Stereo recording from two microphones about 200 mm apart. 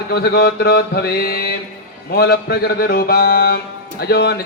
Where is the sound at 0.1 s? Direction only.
50° left (ahead or behind).